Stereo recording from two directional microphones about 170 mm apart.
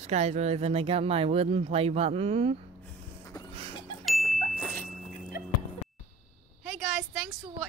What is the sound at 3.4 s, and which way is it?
Cough, 25° left (ahead or behind).